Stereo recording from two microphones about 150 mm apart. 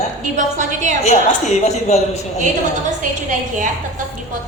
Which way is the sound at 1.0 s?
45° left (ahead or behind).